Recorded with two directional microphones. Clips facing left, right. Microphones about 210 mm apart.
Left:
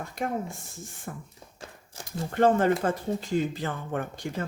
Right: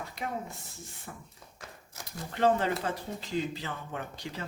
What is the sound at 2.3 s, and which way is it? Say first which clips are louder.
Speech: left 5 dB; 50° left (ahead or behind).